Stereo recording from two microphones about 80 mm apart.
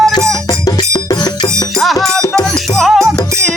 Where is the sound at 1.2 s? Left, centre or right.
Left.